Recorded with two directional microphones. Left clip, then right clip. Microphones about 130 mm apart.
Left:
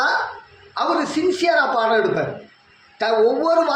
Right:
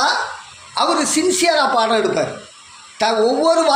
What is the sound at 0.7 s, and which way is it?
A man's voice, 15° right (ahead or behind).